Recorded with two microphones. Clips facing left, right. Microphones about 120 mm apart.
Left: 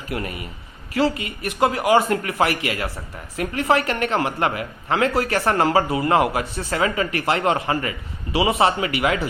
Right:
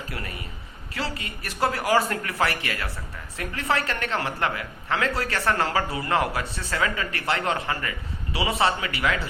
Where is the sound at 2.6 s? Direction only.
30° left (ahead or behind).